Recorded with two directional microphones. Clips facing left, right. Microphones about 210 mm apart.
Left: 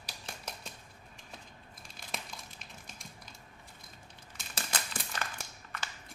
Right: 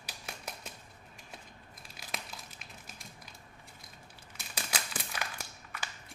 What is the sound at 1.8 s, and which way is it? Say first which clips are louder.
Crumpling: even; 5° right (ahead or behind).